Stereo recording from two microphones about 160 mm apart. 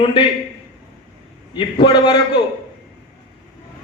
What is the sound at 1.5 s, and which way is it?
Speech, 30° left (ahead or behind).